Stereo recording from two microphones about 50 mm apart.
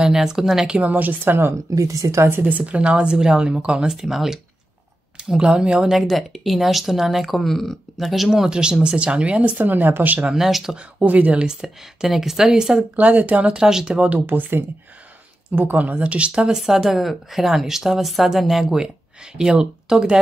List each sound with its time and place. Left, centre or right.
0.0 s a woman's voice: centre
0.7 s a woman's voice: right
1.8 s speech: right
2.2 s speech: right
2.5 s a woman's voice: right; by 4.4 s centre
5.1 s a woman's voice: centre; by 10.1 s right
10.3 s a woman's voice: centre
10.8 s speech: right
11.4 s a woman's voice: centre
12.9 s speech: right
13.7 s a woman's voice: centre
14.2 s a woman's voice: right
15.9 s speech: right
16.5 s a woman's voice: centre